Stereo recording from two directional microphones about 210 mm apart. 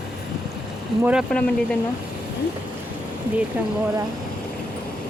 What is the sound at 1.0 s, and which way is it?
Speech, 5° right (ahead or behind).